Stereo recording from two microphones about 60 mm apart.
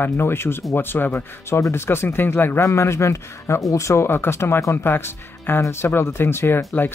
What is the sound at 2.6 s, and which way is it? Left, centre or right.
Speech, left.